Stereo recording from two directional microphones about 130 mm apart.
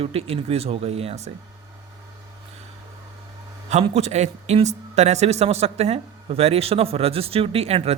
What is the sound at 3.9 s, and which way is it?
Speech, 60° right (ahead or behind).